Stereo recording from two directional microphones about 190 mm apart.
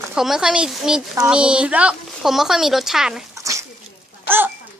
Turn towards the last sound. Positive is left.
turn(degrees=-10)  # may be behind; listen again after turning